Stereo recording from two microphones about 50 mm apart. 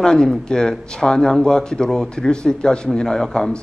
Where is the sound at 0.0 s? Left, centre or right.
Centre.